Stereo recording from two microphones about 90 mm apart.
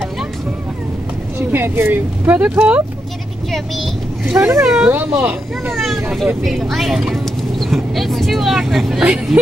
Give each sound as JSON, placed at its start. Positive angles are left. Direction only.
{"t": 1.5, "sound": "speech", "side_deg": -20}
{"t": 3.5, "sound": "a child's voice", "side_deg": 0}
{"t": 4.3, "sound": "speech", "side_deg": -30}
{"t": 5.8, "sound": "vehicle", "side_deg": 0}
{"t": 6.4, "sound": "speech", "side_deg": 0}